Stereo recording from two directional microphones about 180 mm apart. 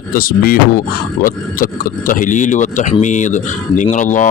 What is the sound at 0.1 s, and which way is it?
Speech, 55° left (ahead or behind).